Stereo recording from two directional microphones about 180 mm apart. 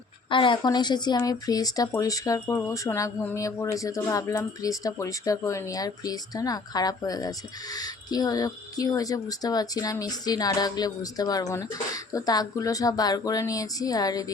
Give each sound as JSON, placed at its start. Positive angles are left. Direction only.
{"t": 0.3, "sound": "speech", "side_deg": 25}